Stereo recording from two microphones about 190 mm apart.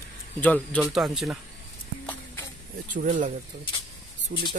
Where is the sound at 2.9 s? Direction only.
40° right (ahead or behind).